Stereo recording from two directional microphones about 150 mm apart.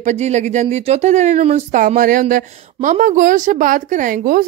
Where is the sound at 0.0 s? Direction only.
50° right (ahead or behind).